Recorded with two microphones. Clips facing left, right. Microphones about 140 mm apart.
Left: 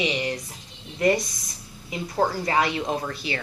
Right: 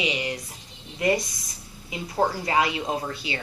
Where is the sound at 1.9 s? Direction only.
15° right (ahead or behind).